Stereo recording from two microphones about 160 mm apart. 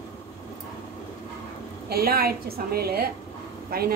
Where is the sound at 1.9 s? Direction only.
70° right (ahead or behind).